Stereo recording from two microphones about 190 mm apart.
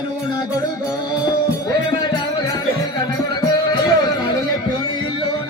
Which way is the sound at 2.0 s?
25° left (ahead or behind).